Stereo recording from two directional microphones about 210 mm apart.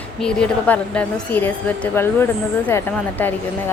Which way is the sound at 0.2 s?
5° left (ahead or behind).